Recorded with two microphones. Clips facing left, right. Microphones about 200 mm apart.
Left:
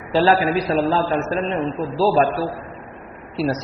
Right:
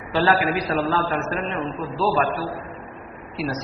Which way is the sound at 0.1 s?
30° left (ahead or behind).